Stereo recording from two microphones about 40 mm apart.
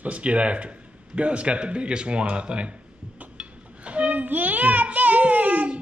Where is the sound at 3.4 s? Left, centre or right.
Right.